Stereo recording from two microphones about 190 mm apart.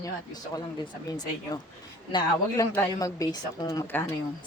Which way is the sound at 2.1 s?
20° left (ahead or behind).